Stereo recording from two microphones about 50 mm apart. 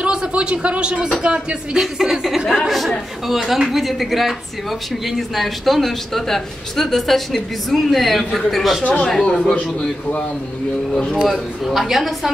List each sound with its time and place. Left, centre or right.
0.0 s speech: centre
1.2 s music: right
1.8 s a woman's voice: centre
11.0 s speech: centre
11.2 s a man's voice: centre